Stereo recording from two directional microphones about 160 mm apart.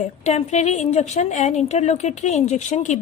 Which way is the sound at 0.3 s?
45° left (ahead or behind).